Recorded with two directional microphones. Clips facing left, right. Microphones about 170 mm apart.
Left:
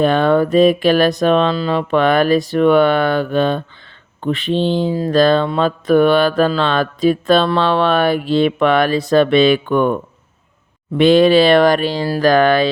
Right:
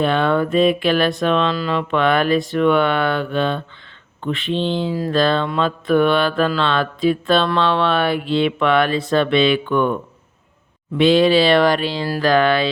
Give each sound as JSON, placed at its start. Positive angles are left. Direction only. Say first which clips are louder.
{"t": 0.0, "sound": "speech", "louder": "left 4 dB", "side_deg": 40}
{"t": 4.9, "sound": "a sound", "louder": "left 3 dB", "side_deg": 25}
{"t": 5.1, "sound": "speech", "louder": "left 5 dB", "side_deg": 40}